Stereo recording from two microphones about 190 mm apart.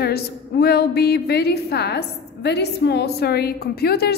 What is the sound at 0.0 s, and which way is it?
A woman's voice, 55° left (ahead or behind).